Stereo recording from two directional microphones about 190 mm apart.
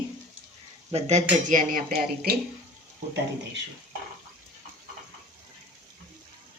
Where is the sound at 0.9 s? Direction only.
35° right (ahead or behind); by 2.4 s 50° right (ahead or behind).